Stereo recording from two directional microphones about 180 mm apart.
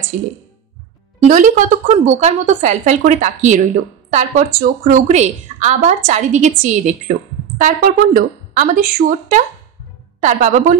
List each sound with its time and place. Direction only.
1.2 s a woman's voice: 45° right (ahead or behind)